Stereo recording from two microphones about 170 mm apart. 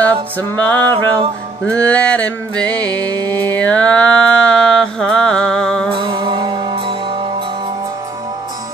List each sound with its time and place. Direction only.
0.6 s music: 10° left (ahead or behind)
0.8 s music: 30° right (ahead or behind)
1.7 s music: 5° left (ahead or behind)
3.1 s music: 25° right (ahead or behind)
3.3 s music: 10° left (ahead or behind)
5.9 s music: 30° right (ahead or behind)